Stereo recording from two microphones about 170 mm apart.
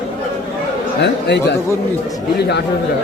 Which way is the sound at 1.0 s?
90° left.